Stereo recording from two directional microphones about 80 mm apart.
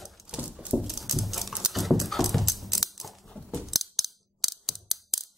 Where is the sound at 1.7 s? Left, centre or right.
Centre.